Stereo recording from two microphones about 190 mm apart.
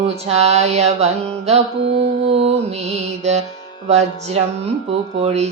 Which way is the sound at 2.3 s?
30° right (ahead or behind).